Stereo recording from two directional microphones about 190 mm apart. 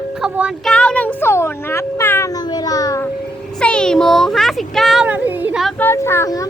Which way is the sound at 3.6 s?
5° left (ahead or behind).